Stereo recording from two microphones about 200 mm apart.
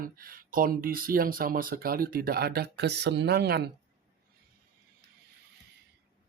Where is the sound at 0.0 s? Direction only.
45° right (ahead or behind).